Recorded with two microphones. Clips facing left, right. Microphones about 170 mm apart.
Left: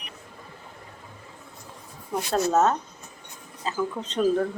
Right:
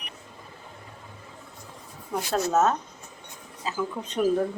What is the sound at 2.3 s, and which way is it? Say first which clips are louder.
Speech: left 1 dB; 5° right (ahead or behind).